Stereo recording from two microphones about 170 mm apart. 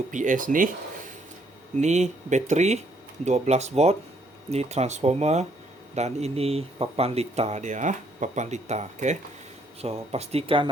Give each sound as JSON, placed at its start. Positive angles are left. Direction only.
{"t": 0.1, "sound": "speech", "side_deg": -50}
{"t": 1.8, "sound": "speech", "side_deg": -45}